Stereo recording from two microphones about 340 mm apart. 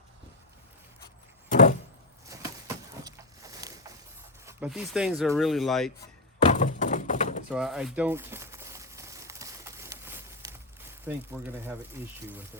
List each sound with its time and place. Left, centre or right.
1.5 s vehicle: left
2.3 s a sound: centre
4.4 s speech: centre
6.4 s thunk: left
7.5 s crumpling: centre